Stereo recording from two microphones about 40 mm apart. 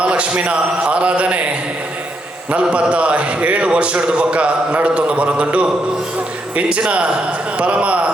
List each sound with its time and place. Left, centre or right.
0.0 s a man's voice: right